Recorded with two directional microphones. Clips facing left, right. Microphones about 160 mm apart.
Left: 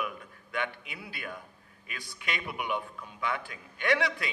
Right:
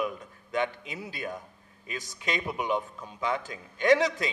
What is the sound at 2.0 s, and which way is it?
Speech, 40° right (ahead or behind).